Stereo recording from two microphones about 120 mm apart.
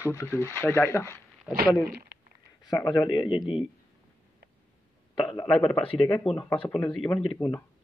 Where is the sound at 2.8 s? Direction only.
40° left (ahead or behind).